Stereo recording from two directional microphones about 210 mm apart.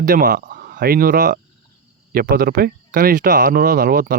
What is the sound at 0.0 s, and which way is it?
Speech, 40° right (ahead or behind).